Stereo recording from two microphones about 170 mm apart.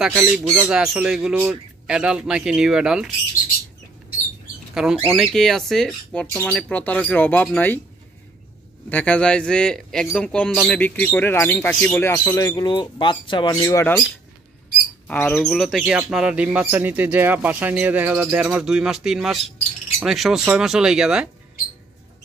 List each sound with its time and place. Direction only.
0.0 s speech: 5° right (ahead or behind)
4.7 s speech: centre (ahead or behind)
8.8 s speech: 10° left (ahead or behind); by 13.6 s 25° left (ahead or behind)
13.6 s speech: 15° left (ahead or behind)
15.0 s speech: 10° left (ahead or behind)